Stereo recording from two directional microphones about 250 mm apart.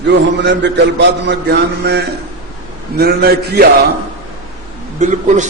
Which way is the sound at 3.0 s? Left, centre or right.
Right.